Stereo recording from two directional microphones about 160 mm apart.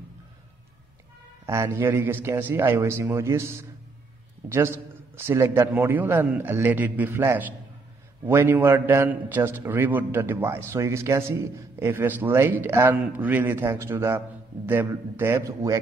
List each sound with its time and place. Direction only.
1.4 s a man's voice: 20° right (ahead or behind)